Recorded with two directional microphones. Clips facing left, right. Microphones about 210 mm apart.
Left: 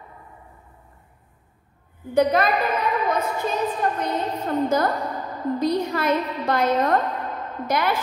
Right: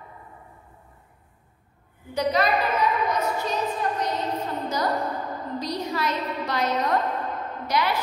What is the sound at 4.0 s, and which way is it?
Music, 55° left (ahead or behind).